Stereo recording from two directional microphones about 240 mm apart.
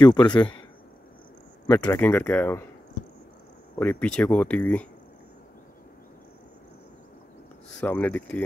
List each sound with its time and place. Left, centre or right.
0.0 s speech: centre
1.7 s speech: centre
3.7 s speech: centre
7.8 s speech: centre